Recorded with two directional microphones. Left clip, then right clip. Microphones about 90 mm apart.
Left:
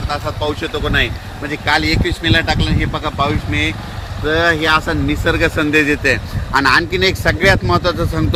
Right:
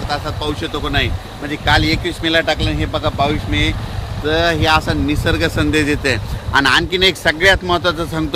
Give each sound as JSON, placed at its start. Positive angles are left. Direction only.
{"t": 0.1, "sound": "speech", "side_deg": -30}
{"t": 2.8, "sound": "speech", "side_deg": -25}
{"t": 3.5, "sound": "speech", "side_deg": -10}
{"t": 4.6, "sound": "speech", "side_deg": -20}
{"t": 5.8, "sound": "speech", "side_deg": -35}